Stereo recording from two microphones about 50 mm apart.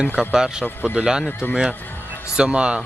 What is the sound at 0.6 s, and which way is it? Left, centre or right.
Speech, left.